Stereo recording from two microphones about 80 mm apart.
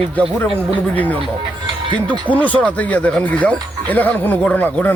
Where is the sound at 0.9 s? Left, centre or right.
Left.